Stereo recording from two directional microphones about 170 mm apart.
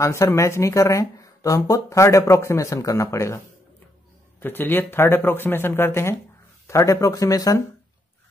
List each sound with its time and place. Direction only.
0.0 s speech: 15° left (ahead or behind)
4.4 s speech: 10° left (ahead or behind)